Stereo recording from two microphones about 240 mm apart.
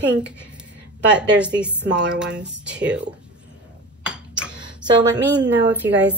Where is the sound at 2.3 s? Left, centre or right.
Right.